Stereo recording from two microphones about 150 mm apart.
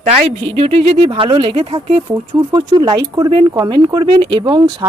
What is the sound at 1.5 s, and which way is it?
Speech, 35° right (ahead or behind).